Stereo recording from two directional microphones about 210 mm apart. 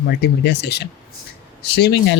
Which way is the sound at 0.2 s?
50° left (ahead or behind).